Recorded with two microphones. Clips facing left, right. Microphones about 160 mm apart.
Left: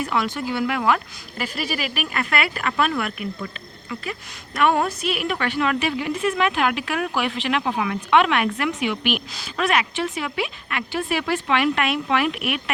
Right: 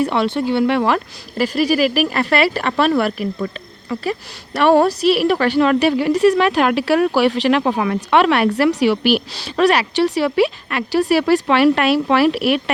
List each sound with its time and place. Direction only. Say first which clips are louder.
0.0 s speech: right 7 dB; 30° right (ahead or behind)